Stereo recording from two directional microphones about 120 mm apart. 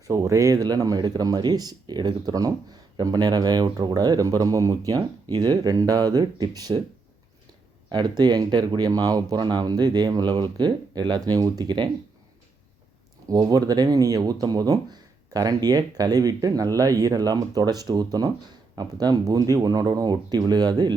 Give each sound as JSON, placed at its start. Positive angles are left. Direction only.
{"t": 0.1, "sound": "speech", "side_deg": -25}
{"t": 7.9, "sound": "speech", "side_deg": -35}
{"t": 13.2, "sound": "speech", "side_deg": -30}